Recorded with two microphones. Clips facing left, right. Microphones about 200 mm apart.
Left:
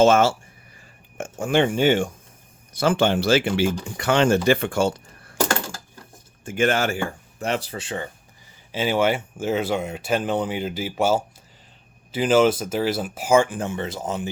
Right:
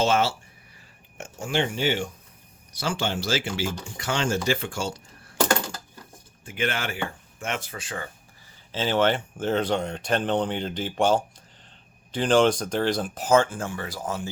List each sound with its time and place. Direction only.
0.0 s speech: 50° left (ahead or behind)
6.4 s speech: 45° left (ahead or behind); by 8.1 s 25° left (ahead or behind)
8.7 s speech: 10° left (ahead or behind)